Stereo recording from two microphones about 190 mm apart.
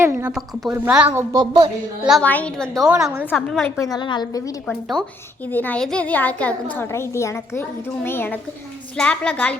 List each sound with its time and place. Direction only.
0.0 s a woman's voice: 10° right (ahead or behind)
1.3 s a woman's voice: 20° right (ahead or behind)
2.0 s a woman's voice: 5° left (ahead or behind)
3.8 s a woman's voice: 20° left (ahead or behind)
4.6 s a woman's voice: 5° left (ahead or behind)